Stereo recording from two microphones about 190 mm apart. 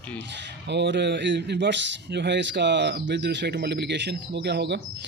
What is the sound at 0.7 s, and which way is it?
Speech, 65° right (ahead or behind).